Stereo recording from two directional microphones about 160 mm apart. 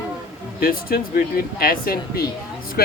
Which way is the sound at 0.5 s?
65° left (ahead or behind).